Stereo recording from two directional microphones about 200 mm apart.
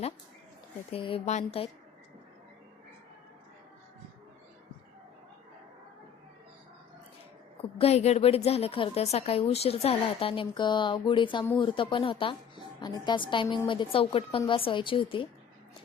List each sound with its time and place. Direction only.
0.9 s a woman's voice: 30° left (ahead or behind)
7.8 s a woman's voice: 30° left (ahead or behind)